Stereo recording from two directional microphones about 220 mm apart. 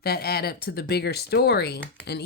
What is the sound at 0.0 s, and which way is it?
A woman's voice, 45° left (ahead or behind).